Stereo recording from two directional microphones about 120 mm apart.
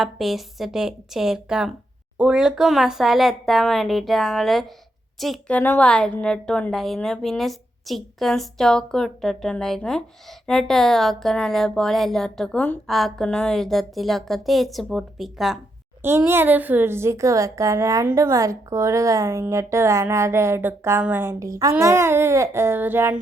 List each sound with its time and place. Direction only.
0.0 s a woman's voice: centre (ahead or behind)
5.5 s a woman's voice: 15° left (ahead or behind)
12.9 s a woman's voice: centre (ahead or behind)
16.0 s speech: 20° right (ahead or behind)